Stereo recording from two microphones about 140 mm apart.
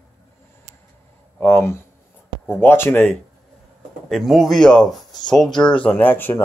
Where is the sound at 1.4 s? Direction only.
15° left (ahead or behind).